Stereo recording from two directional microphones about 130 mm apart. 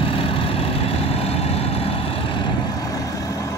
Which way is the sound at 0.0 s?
45° left (ahead or behind).